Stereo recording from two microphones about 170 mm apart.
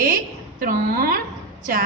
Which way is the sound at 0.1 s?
55° right (ahead or behind).